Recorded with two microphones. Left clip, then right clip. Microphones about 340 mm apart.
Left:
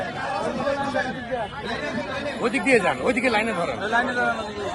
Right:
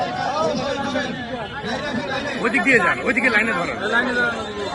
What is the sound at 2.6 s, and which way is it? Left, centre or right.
Speech, centre.